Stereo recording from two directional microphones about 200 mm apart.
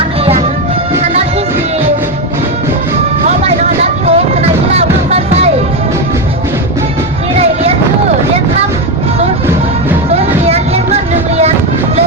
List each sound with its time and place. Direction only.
3.2 s music: 30° right (ahead or behind)
10.1 s music: 30° right (ahead or behind)